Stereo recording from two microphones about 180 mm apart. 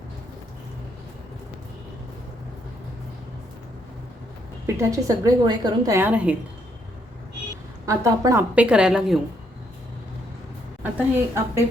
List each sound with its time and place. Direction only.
4.6 s a woman's voice: 15° right (ahead or behind)
7.9 s a woman's voice: 15° right (ahead or behind)
10.9 s a woman's voice: 15° right (ahead or behind)